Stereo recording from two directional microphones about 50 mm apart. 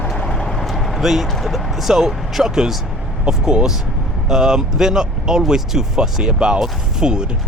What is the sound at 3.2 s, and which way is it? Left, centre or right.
Speech, centre.